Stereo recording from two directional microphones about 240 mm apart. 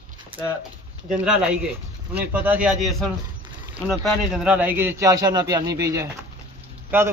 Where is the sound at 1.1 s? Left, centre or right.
Centre.